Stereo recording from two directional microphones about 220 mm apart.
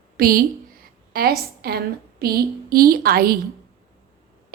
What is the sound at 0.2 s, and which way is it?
A woman's voice, 40° right (ahead or behind).